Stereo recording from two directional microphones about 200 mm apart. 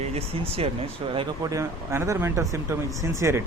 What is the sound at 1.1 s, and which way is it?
Speech, 15° right (ahead or behind).